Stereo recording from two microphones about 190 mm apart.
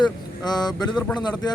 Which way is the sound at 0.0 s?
20° left (ahead or behind).